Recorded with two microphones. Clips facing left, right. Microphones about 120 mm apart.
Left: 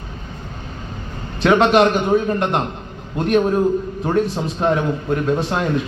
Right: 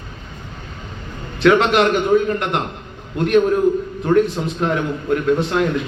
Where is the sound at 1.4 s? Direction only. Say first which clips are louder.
Even; 30° left (ahead or behind).